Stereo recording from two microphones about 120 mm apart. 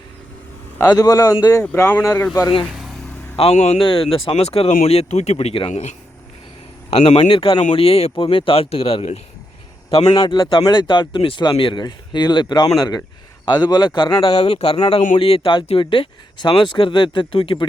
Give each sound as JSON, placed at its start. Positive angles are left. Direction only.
{"t": 0.8, "sound": "speech", "side_deg": 30}
{"t": 1.7, "sound": "speech", "side_deg": 20}
{"t": 2.4, "sound": "speech", "side_deg": 35}
{"t": 3.3, "sound": "speech", "side_deg": 60}
{"t": 3.8, "sound": "speech", "side_deg": 45}
{"t": 6.9, "sound": "speech", "side_deg": 55}
{"t": 10.2, "sound": "speech", "side_deg": 40}